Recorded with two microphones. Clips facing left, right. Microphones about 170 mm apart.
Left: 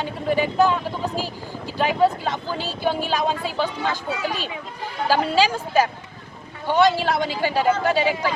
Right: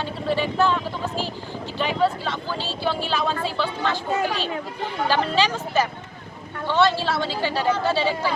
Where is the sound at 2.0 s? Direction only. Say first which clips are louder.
Left 3 dB; 15° left (ahead or behind).